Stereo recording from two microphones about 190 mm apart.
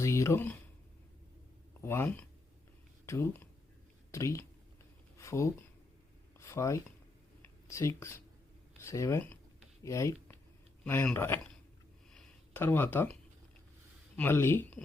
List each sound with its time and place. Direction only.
0.0 s speech: 15° left (ahead or behind)
1.8 s speech: 15° left (ahead or behind)
12.1 s a sound: 10° left (ahead or behind)
14.2 s speech: 10° left (ahead or behind)